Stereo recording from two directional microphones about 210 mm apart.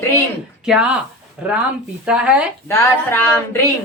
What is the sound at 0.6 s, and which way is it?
Speech, 5° right (ahead or behind).